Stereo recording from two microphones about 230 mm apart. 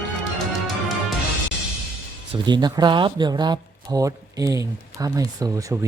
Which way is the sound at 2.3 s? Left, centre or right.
Centre.